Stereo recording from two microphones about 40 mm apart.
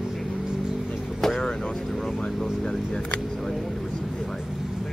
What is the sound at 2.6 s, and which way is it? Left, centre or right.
Camera, centre.